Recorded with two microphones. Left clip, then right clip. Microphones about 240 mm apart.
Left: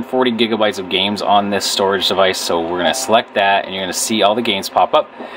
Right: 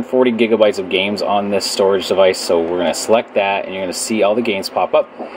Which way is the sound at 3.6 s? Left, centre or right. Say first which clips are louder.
Left 2 dB; left.